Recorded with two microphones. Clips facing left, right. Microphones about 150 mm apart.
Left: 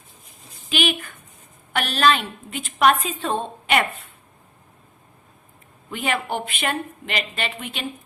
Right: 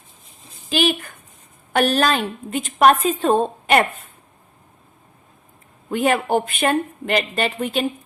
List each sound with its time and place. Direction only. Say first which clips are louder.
0.7 s a woman's voice: right 4 dB; 40° right (ahead or behind)
5.9 s a woman's voice: right 7 dB; 45° right (ahead or behind)